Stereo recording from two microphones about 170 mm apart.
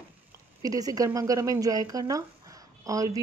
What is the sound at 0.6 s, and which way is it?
Speech, 20° right (ahead or behind).